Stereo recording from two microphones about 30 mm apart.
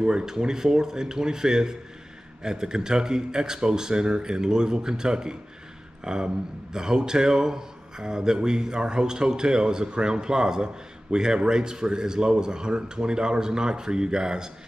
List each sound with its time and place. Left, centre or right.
0.0 s speech: right